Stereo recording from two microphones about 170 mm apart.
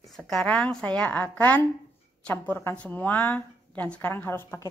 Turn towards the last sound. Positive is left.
turn(degrees=15)  # may be behind; listen again after turning